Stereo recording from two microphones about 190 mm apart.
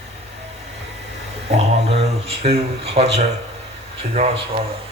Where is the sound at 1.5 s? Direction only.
30° right (ahead or behind).